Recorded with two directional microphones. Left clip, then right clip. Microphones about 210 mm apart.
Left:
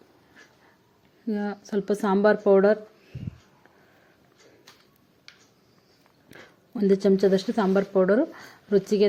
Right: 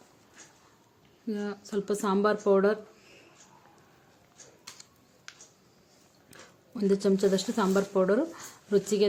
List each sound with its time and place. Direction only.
1.3 s a woman's voice: 15° left (ahead or behind)
6.2 s speech: 15° left (ahead or behind)